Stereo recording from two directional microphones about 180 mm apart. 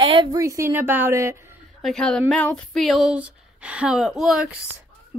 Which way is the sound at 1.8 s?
Centre (ahead or behind).